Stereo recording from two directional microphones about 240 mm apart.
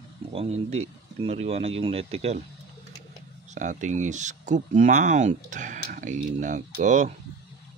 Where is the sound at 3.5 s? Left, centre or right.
Right.